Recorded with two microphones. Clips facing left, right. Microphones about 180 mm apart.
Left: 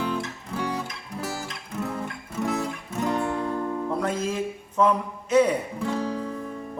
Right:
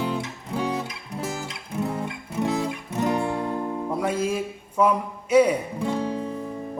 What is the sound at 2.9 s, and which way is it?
Music, 15° right (ahead or behind).